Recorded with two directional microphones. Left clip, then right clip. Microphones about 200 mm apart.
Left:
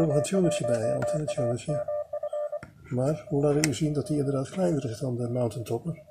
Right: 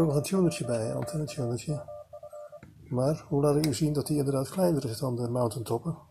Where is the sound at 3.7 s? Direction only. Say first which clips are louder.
Left 1 dB; 25° left (ahead or behind).